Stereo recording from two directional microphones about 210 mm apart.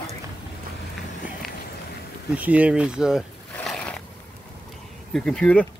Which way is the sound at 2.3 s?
5° right (ahead or behind).